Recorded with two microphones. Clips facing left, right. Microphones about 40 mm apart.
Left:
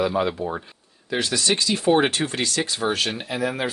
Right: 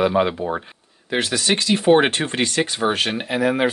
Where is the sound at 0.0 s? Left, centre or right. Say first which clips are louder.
Right 4 dB; right.